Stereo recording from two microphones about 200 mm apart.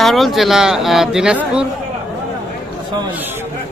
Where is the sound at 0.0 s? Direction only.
Centre (ahead or behind).